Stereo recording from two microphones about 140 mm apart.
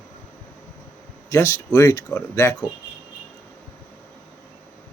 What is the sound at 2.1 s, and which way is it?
Speech, 20° left (ahead or behind).